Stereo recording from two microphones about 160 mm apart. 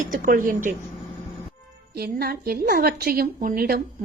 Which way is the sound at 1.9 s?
75° right (ahead or behind).